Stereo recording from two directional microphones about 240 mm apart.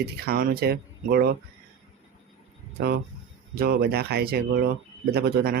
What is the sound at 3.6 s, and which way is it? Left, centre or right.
Speech, right.